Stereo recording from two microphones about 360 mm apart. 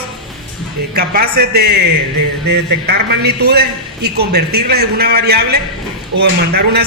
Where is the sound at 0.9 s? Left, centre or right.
Right.